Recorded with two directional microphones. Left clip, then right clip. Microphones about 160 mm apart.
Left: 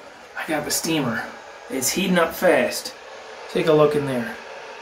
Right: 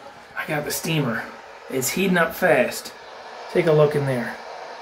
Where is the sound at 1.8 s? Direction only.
20° right (ahead or behind).